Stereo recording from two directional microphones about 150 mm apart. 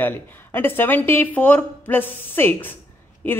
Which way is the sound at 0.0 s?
15° left (ahead or behind).